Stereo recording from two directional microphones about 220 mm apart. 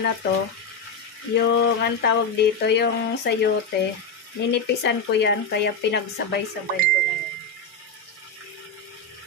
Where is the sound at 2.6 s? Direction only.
50° left (ahead or behind).